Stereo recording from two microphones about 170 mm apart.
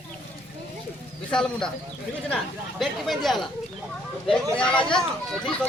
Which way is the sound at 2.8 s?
Centre (ahead or behind).